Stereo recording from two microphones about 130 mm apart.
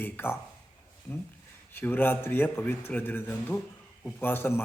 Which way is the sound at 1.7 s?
15° left (ahead or behind).